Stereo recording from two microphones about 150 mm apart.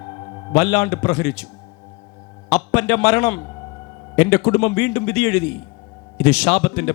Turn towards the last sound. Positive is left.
turn(degrees=25)  # may be behind; listen again after turning